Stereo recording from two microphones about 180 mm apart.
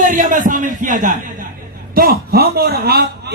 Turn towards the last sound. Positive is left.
turn(degrees=-60)  # may be behind; listen again after turning